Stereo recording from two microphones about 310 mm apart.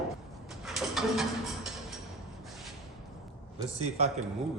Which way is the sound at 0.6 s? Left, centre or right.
Centre.